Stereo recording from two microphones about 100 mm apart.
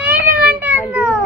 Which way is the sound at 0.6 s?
15° right (ahead or behind).